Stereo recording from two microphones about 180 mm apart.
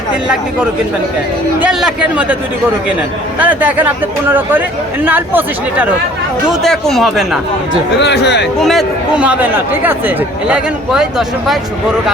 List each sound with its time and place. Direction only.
1.6 s speech: 5° right (ahead or behind)
3.3 s speech: 10° right (ahead or behind)
8.0 s speech: 70° left (ahead or behind)
8.5 s speech: centre (ahead or behind)